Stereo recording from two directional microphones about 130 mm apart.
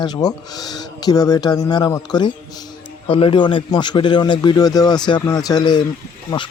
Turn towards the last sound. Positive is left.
turn(degrees=40)  # may be behind; listen again after turning